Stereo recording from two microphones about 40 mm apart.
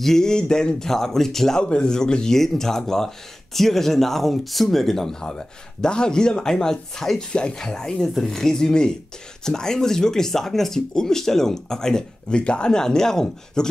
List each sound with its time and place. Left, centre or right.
0.0 s speech: centre
1.6 s speech: left